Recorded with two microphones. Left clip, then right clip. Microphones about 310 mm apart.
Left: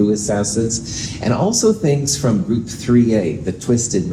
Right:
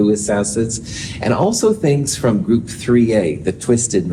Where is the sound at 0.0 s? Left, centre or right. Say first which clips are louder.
Right 2 dB; right.